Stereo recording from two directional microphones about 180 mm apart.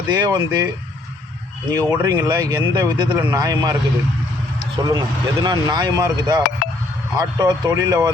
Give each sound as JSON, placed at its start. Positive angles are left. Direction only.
{"t": 0.1, "sound": "speech", "side_deg": -20}
{"t": 1.7, "sound": "speech", "side_deg": -20}
{"t": 4.8, "sound": "speech", "side_deg": -20}